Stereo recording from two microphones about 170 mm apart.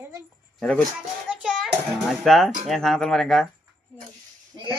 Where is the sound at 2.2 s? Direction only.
Centre (ahead or behind).